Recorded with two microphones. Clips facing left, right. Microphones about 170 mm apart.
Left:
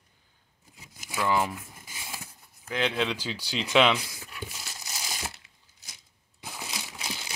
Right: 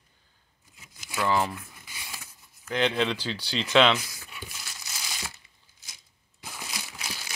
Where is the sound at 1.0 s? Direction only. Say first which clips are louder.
Right 1 dB; 10° left (ahead or behind).